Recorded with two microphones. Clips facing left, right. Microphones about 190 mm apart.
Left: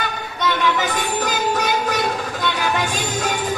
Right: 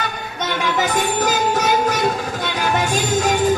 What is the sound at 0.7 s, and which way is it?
Music, 45° right (ahead or behind).